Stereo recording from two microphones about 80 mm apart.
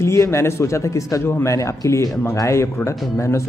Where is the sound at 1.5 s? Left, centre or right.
Left.